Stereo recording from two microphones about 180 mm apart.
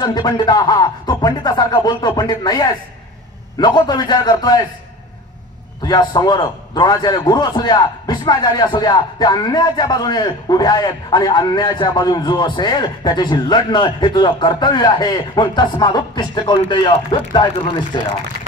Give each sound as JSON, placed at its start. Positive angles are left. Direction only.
{"t": 0.0, "sound": "a man's voice", "side_deg": 25}
{"t": 5.9, "sound": "a man's voice", "side_deg": 20}